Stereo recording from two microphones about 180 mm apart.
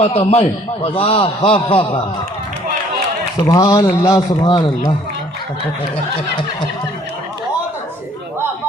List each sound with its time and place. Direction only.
0.0 s a man's voice: 35° left (ahead or behind)
3.4 s speech: 20° left (ahead or behind)